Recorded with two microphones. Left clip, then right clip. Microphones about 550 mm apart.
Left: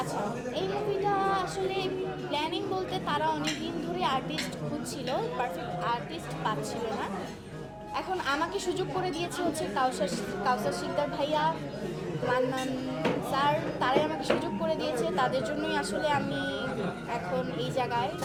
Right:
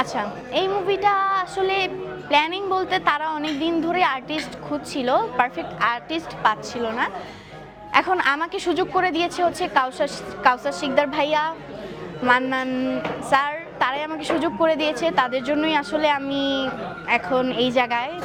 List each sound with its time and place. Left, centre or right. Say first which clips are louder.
0.5 s a woman's voice: right 11 dB; right
7.9 s a woman's voice: right 11 dB; right